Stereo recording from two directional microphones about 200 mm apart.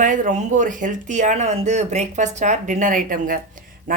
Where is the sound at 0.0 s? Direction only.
40° right (ahead or behind).